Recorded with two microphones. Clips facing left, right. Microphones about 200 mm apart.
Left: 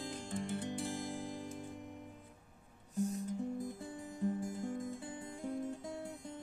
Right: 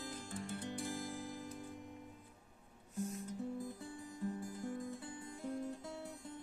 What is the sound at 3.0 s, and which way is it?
Music, 40° left (ahead or behind).